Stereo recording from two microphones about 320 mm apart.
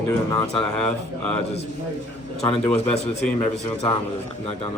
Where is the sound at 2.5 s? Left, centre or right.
Centre.